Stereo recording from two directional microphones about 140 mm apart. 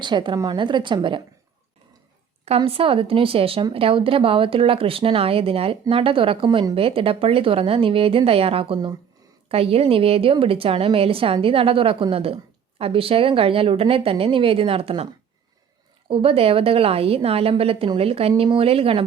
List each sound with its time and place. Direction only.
0.0 s a woman's voice: 35° right (ahead or behind)
2.6 s a woman's voice: 40° right (ahead or behind)
16.0 s a woman's voice: 40° right (ahead or behind)